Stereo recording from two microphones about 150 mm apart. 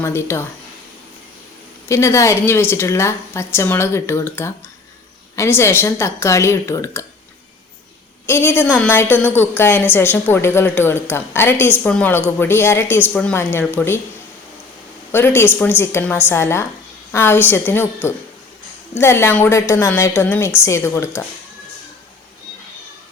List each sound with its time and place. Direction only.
0.0 s a woman's voice: 15° left (ahead or behind)
1.9 s a woman's voice: 20° left (ahead or behind)
8.3 s a woman's voice: 15° left (ahead or behind)
15.1 s a woman's voice: 15° left (ahead or behind)